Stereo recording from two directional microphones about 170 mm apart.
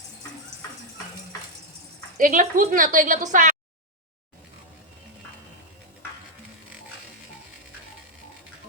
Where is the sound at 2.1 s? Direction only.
50° right (ahead or behind).